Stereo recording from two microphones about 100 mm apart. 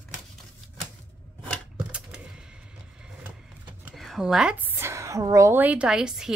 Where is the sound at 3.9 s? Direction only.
Centre (ahead or behind).